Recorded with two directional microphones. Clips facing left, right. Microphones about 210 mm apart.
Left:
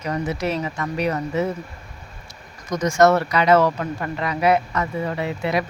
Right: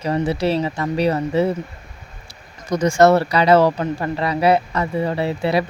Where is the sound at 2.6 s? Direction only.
30° right (ahead or behind).